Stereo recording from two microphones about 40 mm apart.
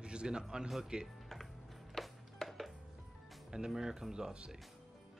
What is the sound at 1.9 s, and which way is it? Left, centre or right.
Music, centre.